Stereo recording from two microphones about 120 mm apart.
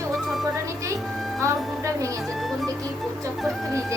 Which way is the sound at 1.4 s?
25° right (ahead or behind).